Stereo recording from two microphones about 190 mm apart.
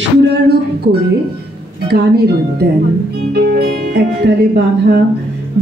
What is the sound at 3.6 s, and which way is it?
Speech, 55° right (ahead or behind).